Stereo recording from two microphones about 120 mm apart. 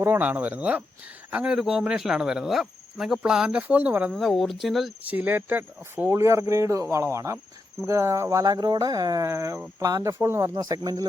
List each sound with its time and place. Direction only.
0.0 s speech: 15° right (ahead or behind)
4.1 s speech: centre (ahead or behind)
5.0 s speech: 15° right (ahead or behind)
10.5 s speech: 35° right (ahead or behind)